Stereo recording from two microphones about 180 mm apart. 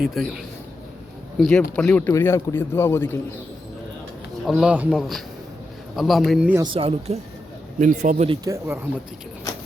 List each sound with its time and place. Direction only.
0.0 s speech: centre (ahead or behind)
4.4 s speech: 5° right (ahead or behind)
6.6 s speech: 30° right (ahead or behind)
7.8 s speech: 45° right (ahead or behind)
8.4 s speech: 15° right (ahead or behind)